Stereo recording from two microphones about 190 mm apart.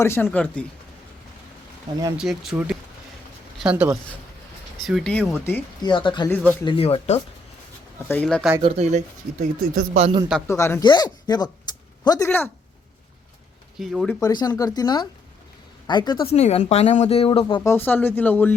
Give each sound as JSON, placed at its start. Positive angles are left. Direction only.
{"t": 0.0, "sound": "speech", "side_deg": 15}
{"t": 2.1, "sound": "speech", "side_deg": 0}
{"t": 5.8, "sound": "speech", "side_deg": 25}
{"t": 6.2, "sound": "speech", "side_deg": 10}
{"t": 6.7, "sound": "speech", "side_deg": 30}
{"t": 8.0, "sound": "speech", "side_deg": 10}
{"t": 8.5, "sound": "speech", "side_deg": -30}
{"t": 9.6, "sound": "speech", "side_deg": -50}
{"t": 10.0, "sound": "a man's voice", "side_deg": -25}
{"t": 10.4, "sound": "speech", "side_deg": 15}
{"t": 13.7, "sound": "speech", "side_deg": 0}
{"t": 14.2, "sound": "speech", "side_deg": 20}
{"t": 16.3, "sound": "speech", "side_deg": 35}
{"t": 17.7, "sound": "speech", "side_deg": 10}